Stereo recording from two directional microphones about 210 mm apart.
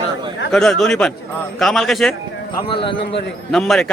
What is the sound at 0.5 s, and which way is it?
A man's voice, centre (ahead or behind).